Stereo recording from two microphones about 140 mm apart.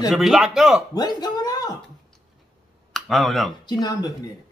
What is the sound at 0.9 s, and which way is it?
Speech, 30° left (ahead or behind).